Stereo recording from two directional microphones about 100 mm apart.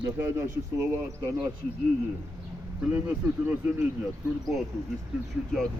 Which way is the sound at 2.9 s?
20° right (ahead or behind).